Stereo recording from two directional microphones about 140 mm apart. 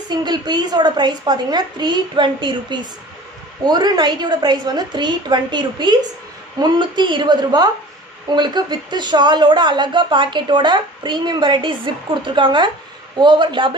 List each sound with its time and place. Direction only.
0.1 s a man's voice: 30° right (ahead or behind)